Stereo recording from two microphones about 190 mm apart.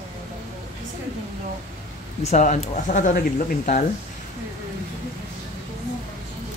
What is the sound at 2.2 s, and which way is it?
Speech, 40° left (ahead or behind).